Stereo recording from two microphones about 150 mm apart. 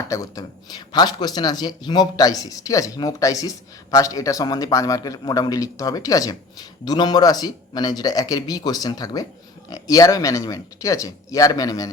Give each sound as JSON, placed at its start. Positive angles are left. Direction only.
{"t": 0.1, "sound": "speech", "side_deg": 25}